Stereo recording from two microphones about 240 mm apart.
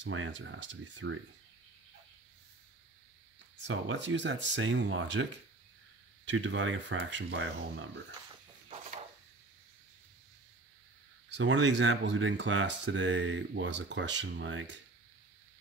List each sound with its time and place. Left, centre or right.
0.0 s speech: right
3.6 s speech: right
6.2 s speech: right
11.2 s speech: right